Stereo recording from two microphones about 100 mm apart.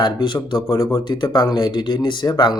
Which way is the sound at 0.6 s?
35° left (ahead or behind).